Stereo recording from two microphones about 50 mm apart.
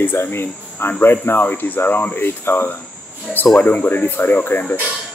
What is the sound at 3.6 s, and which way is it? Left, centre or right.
Speech, left.